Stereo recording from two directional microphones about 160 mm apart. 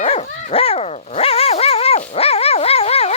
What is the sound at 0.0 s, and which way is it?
Dog, 40° left (ahead or behind).